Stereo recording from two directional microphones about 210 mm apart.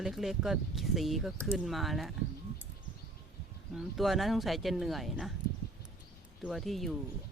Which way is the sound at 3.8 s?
Centre (ahead or behind).